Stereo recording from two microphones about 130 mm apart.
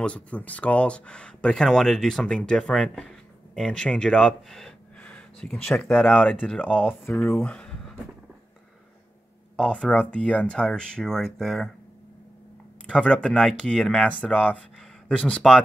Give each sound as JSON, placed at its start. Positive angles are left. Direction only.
{"t": 0.0, "sound": "speech", "side_deg": 10}
{"t": 7.3, "sound": "speech", "side_deg": 10}
{"t": 9.6, "sound": "speech", "side_deg": 5}
{"t": 12.8, "sound": "speech", "side_deg": 5}